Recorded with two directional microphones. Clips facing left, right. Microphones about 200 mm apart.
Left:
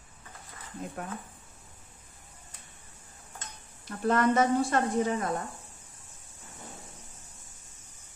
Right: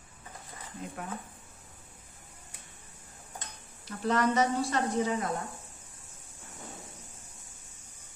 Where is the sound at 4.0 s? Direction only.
50° left (ahead or behind).